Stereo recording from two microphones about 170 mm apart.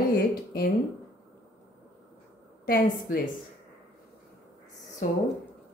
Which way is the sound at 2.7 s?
60° left (ahead or behind).